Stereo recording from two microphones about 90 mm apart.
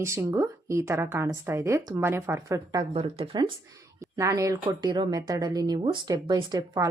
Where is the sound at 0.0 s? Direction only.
30° right (ahead or behind).